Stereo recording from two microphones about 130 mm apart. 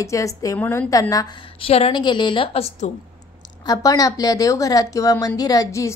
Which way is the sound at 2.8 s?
65° left (ahead or behind).